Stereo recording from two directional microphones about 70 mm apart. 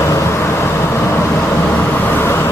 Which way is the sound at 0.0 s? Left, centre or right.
Left.